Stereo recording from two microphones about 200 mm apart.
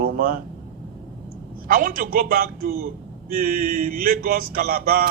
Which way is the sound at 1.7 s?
45° right (ahead or behind).